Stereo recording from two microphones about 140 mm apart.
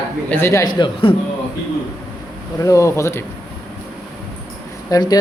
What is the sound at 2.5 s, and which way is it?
Speech, 20° left (ahead or behind).